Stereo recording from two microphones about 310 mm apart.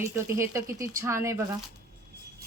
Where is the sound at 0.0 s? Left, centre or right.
Centre.